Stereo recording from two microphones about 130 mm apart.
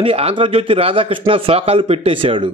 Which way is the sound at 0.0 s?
45° right (ahead or behind).